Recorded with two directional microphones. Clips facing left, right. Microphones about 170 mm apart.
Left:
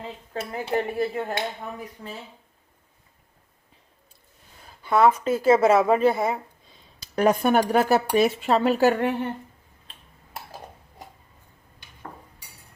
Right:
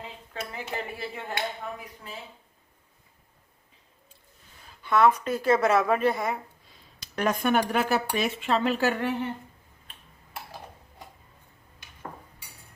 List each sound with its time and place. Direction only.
0.5 s speech: 40° left (ahead or behind)
4.8 s a woman's voice: 30° left (ahead or behind); by 9.1 s 45° left (ahead or behind)